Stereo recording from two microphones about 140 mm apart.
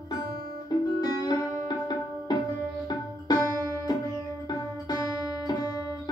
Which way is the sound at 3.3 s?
30° left (ahead or behind).